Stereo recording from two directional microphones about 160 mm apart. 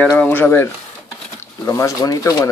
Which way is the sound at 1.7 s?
20° left (ahead or behind).